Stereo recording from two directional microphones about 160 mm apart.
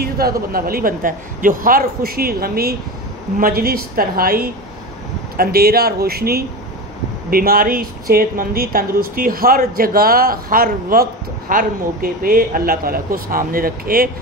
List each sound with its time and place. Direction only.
0.0 s a woman's voice: 70° right (ahead or behind)